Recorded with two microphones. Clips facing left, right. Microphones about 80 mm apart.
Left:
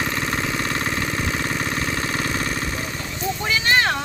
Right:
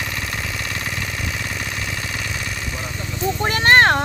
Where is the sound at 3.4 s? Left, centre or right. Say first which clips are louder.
Right 6 dB; right.